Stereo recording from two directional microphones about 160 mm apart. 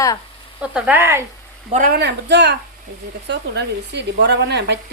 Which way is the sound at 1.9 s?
90° right.